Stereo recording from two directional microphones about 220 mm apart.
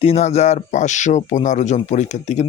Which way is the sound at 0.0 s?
30° left (ahead or behind).